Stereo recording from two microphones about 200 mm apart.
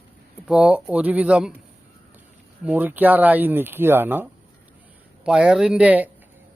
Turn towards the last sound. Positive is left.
turn(degrees=-5)  # may be behind; listen again after turning